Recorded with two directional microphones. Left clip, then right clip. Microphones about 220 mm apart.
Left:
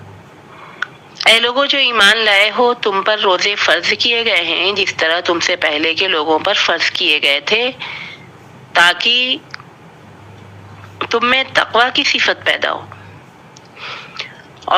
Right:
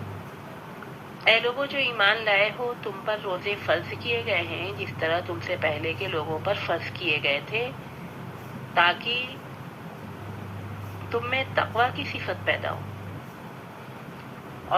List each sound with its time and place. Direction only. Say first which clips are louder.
1.2 s a man's voice: left 11 dB; 50° left (ahead or behind)
8.7 s a man's voice: left 11 dB; 55° left (ahead or behind)
11.1 s a man's voice: left 13 dB; 55° left (ahead or behind)